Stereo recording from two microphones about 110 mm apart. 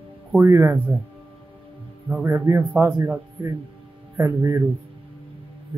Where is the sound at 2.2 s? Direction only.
20° right (ahead or behind).